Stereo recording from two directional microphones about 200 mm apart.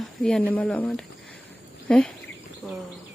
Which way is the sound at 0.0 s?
Centre (ahead or behind).